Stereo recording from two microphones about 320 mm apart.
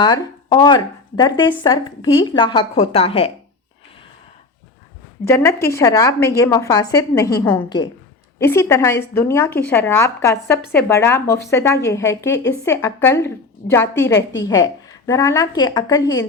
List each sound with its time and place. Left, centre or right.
0.0 s a woman's voice: centre
5.2 s a woman's voice: centre